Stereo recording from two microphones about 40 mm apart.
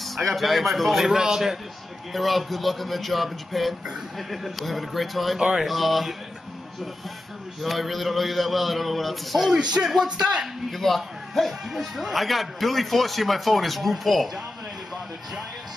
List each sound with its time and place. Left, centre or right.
0.0 s a man's voice: centre
1.1 s a man's voice: centre
2.1 s a man's voice: centre
5.4 s a man's voice: centre
5.7 s a man's voice: centre
7.6 s a man's voice: centre
9.5 s speech: right
10.7 s a man's voice: centre